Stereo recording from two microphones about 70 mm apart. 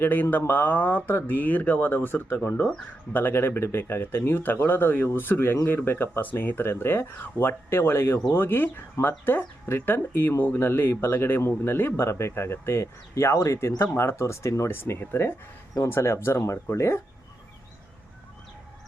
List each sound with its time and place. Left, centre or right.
0.0 s speech: left
14.7 s speech: left